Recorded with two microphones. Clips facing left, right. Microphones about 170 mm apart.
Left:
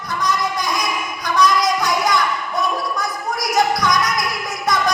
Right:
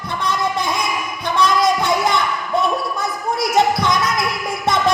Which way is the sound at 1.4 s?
25° right (ahead or behind).